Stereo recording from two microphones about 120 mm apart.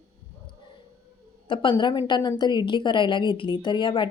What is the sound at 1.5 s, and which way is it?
A woman's voice, 40° left (ahead or behind).